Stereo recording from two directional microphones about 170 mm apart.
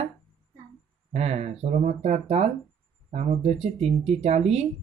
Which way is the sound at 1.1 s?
40° right (ahead or behind).